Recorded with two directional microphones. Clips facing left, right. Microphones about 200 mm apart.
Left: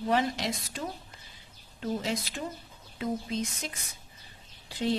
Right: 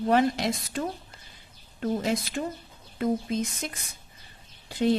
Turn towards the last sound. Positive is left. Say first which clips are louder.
# right 6 dB
turn(degrees=-50)  # may be behind; listen again after turning